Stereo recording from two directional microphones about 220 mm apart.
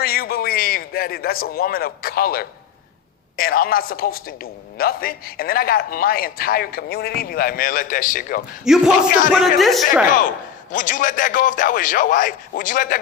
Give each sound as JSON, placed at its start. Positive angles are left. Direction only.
{"t": 0.0, "sound": "a man's voice", "side_deg": 45}
{"t": 8.6, "sound": "a man's voice", "side_deg": 0}
{"t": 9.0, "sound": "a man's voice", "side_deg": 35}
{"t": 9.6, "sound": "a man's voice", "side_deg": 0}
{"t": 10.1, "sound": "a man's voice", "side_deg": 35}